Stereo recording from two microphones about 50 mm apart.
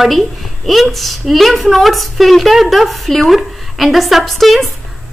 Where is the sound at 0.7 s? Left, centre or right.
Centre.